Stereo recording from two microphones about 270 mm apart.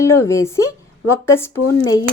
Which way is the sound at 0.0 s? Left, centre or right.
Centre.